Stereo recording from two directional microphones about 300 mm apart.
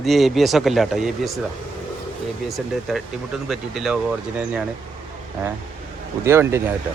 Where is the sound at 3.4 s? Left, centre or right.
Centre.